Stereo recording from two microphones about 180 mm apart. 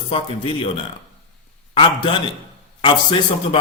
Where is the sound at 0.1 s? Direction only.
30° left (ahead or behind).